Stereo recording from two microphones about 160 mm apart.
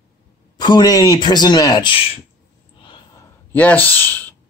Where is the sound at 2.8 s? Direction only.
30° left (ahead or behind).